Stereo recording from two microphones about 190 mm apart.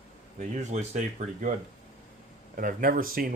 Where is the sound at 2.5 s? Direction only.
45° right (ahead or behind).